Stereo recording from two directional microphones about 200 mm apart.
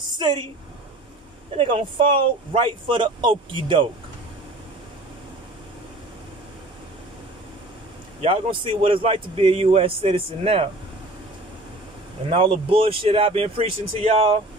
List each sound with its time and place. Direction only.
0.2 s a woman's voice: 25° right (ahead or behind)
1.6 s speech: 25° right (ahead or behind)
8.2 s speech: 25° right (ahead or behind)
12.3 s speech: 25° right (ahead or behind)